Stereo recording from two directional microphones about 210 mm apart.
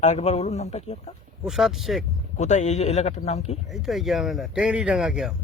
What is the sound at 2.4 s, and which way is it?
Speech, 35° left (ahead or behind).